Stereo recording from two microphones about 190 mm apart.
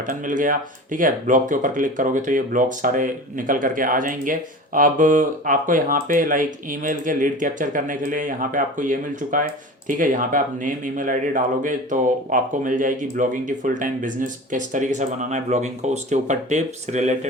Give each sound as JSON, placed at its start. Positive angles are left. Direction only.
{"t": 0.1, "sound": "speech", "side_deg": -45}